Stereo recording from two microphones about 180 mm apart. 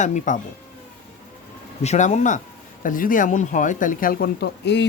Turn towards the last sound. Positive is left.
turn(degrees=65)  # may be behind; listen again after turning